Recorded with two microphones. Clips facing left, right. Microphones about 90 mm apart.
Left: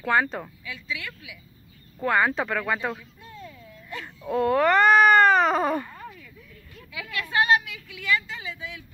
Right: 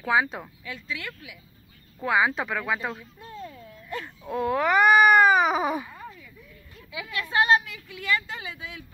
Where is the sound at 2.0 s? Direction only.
5° right (ahead or behind).